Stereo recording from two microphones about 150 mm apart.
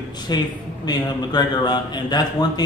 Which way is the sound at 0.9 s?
30° left (ahead or behind).